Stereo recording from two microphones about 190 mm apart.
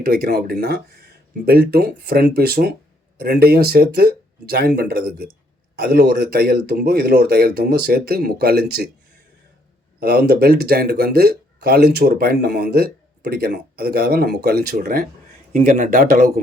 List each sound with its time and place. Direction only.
0.0 s speech: 50° right (ahead or behind)
10.0 s speech: 55° right (ahead or behind)